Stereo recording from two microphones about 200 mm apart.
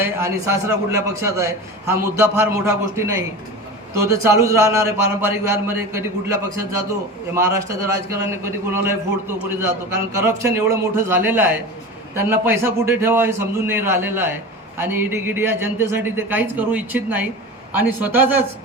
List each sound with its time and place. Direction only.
0.0 s a man's voice: 15° right (ahead or behind)
7.3 s a man's voice: 15° right (ahead or behind)